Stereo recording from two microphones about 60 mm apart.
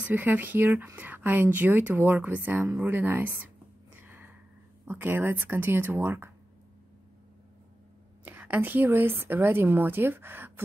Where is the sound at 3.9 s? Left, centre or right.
Right.